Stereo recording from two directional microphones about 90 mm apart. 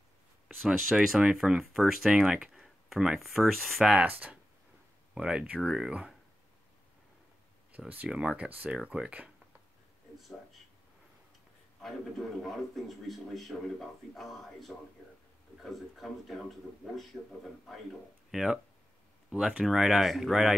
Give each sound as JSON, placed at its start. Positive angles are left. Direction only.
{"t": 0.7, "sound": "a man's voice", "side_deg": 0}
{"t": 4.0, "sound": "a man's voice", "side_deg": -15}
{"t": 7.9, "sound": "speech", "side_deg": -15}
{"t": 10.1, "sound": "a sound", "side_deg": 0}
{"t": 11.8, "sound": "a man's voice", "side_deg": 0}